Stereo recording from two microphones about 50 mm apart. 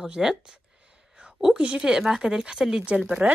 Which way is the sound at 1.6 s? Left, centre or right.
Centre.